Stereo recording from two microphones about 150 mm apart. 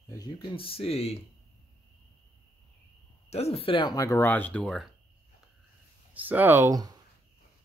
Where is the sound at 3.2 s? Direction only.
45° left (ahead or behind); by 4.9 s centre (ahead or behind).